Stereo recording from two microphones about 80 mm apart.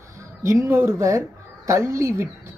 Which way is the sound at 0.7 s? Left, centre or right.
Right.